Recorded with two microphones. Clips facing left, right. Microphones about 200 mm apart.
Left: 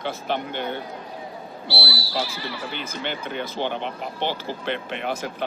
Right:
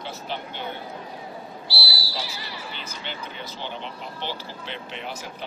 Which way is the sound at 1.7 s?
60° left (ahead or behind).